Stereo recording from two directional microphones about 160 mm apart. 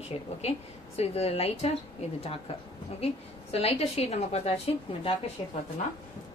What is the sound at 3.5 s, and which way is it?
A woman's voice, 40° left (ahead or behind).